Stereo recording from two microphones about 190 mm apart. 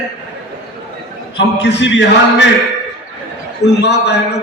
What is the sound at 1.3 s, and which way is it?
A man's voice, 65° left (ahead or behind).